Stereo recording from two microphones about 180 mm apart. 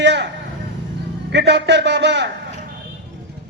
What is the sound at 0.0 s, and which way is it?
Vehicle, 75° right (ahead or behind).